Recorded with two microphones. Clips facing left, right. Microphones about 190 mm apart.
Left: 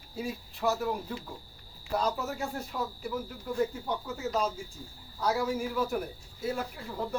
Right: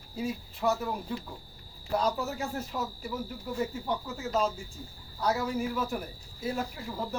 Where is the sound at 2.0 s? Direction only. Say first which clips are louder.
Right 1 dB; centre (ahead or behind).